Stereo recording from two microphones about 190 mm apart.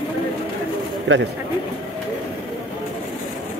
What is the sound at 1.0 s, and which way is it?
Speech, 75° right (ahead or behind).